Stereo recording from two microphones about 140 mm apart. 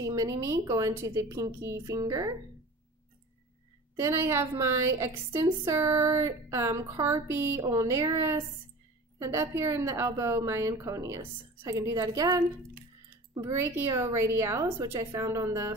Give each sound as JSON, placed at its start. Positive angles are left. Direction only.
{"t": 0.0, "sound": "a woman's voice", "side_deg": -25}
{"t": 3.9, "sound": "a woman's voice", "side_deg": -20}
{"t": 13.5, "sound": "a woman's voice", "side_deg": -20}